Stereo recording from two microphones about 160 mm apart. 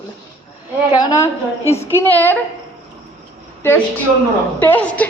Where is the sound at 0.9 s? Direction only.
20° left (ahead or behind).